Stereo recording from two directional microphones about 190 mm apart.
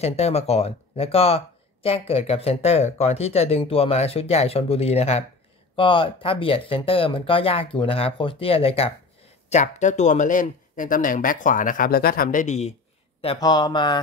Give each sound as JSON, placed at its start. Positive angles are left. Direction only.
{"t": 0.0, "sound": "speech", "side_deg": 35}
{"t": 13.2, "sound": "speech", "side_deg": 25}